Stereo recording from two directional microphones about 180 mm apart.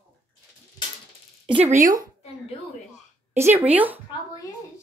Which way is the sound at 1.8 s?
20° right (ahead or behind).